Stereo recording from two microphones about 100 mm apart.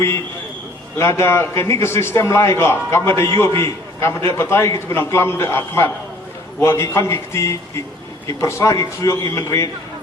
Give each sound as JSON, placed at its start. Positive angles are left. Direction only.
{"t": 0.9, "sound": "a man's voice", "side_deg": 30}